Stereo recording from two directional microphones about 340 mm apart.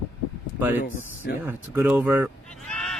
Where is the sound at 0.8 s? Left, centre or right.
Left.